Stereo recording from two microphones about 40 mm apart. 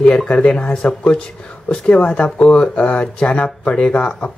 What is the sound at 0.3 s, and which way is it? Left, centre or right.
Speech, left.